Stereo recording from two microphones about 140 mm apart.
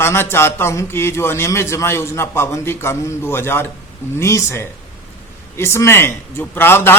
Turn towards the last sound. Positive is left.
turn(degrees=15)  # may be behind; listen again after turning